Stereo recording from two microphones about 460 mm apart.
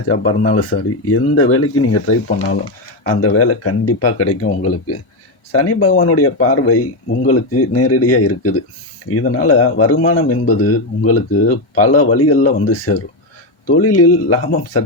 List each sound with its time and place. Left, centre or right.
0.1 s speech: left